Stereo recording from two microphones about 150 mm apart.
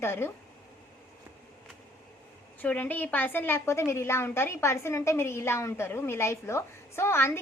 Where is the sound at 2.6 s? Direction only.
10° left (ahead or behind).